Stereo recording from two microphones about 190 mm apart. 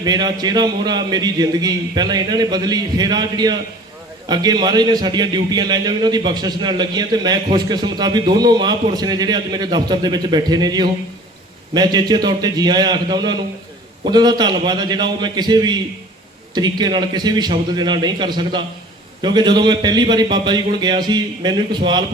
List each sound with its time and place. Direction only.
0.0 s a man's voice: 20° right (ahead or behind)